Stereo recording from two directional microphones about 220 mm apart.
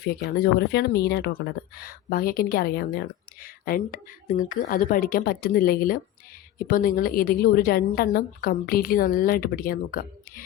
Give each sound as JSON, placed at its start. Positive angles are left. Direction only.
{"t": 0.0, "sound": "a woman's voice", "side_deg": 45}